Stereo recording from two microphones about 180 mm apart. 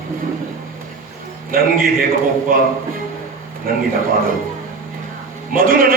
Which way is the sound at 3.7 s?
55° right (ahead or behind).